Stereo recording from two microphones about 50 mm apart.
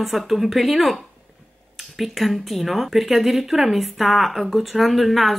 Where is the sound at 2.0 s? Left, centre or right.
Centre.